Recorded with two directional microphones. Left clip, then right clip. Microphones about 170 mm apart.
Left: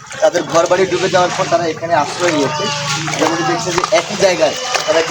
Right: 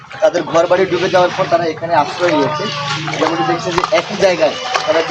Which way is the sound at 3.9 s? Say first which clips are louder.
Left 1 dB; 5° left (ahead or behind).